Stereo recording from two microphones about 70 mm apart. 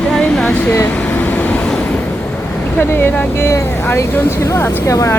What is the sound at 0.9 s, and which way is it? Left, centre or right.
Vehicle, left.